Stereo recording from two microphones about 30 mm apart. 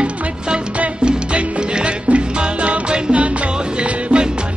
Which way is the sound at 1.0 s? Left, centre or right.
Right.